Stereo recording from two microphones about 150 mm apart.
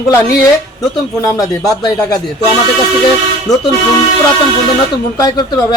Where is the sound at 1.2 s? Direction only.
20° left (ahead or behind).